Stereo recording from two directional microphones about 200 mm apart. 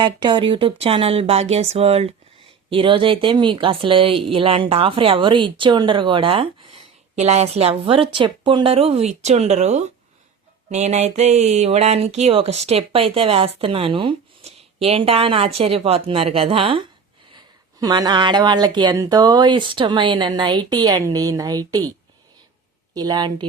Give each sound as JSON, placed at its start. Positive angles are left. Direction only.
{"t": 0.0, "sound": "speech", "side_deg": -25}
{"t": 23.0, "sound": "speech", "side_deg": -20}